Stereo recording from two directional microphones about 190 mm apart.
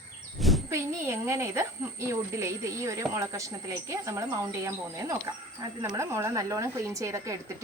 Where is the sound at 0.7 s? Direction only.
15° right (ahead or behind).